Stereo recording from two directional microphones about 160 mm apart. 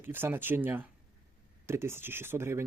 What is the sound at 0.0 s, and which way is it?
Speech, 15° right (ahead or behind).